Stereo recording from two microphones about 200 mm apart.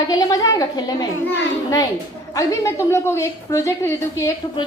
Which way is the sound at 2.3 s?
15° left (ahead or behind).